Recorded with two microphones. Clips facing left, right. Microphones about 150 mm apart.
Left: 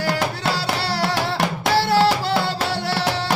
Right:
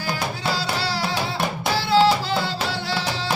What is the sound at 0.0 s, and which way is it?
Music, 75° left (ahead or behind).